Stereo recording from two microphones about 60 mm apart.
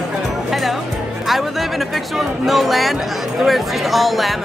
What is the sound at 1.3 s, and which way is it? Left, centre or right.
A woman's voice, centre.